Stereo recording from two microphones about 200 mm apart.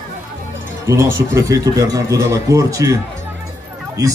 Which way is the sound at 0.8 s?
15° right (ahead or behind).